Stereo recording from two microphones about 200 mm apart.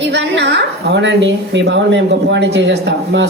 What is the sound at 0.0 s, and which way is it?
A woman's voice, 60° right (ahead or behind).